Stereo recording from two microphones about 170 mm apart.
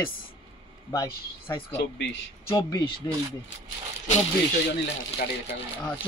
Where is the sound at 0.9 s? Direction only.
15° left (ahead or behind).